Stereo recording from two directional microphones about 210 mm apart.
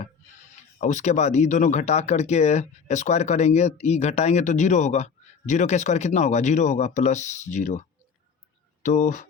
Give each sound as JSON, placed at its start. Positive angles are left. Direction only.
{"t": 0.0, "sound": "speech", "side_deg": 35}